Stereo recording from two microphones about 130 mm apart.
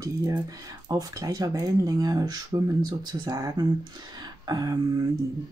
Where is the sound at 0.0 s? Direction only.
30° right (ahead or behind).